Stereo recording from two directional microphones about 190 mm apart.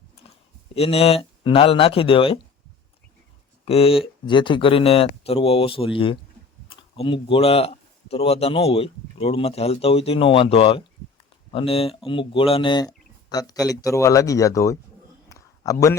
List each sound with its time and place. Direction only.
0.7 s speech: 30° left (ahead or behind)
3.7 s speech: 30° left (ahead or behind)
15.3 s a sound: 15° left (ahead or behind)